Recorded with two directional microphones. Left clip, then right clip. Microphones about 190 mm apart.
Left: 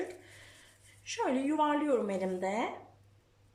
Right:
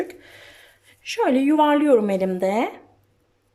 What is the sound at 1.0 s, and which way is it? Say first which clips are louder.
Speech: right 12 dB; 50° right (ahead or behind).